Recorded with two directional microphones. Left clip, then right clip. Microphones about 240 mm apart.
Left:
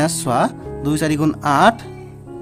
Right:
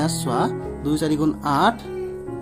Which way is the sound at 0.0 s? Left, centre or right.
Left.